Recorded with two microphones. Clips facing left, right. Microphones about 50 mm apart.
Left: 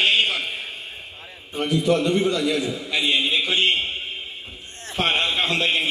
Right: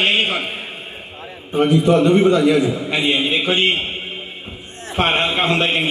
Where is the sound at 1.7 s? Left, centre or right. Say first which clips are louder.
Right 5 dB; right.